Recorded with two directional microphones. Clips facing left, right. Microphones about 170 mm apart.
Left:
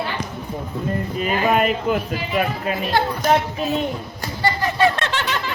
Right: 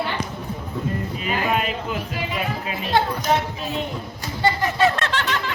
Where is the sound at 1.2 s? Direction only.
50° left (ahead or behind).